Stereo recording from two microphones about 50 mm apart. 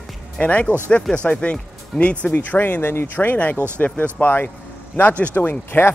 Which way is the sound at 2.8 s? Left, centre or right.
Left.